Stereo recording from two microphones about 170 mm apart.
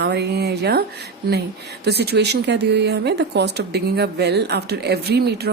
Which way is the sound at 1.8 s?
70° right (ahead or behind).